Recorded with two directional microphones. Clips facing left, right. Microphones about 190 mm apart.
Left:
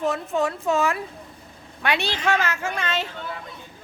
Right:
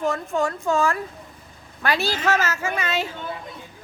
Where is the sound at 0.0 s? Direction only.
Centre (ahead or behind).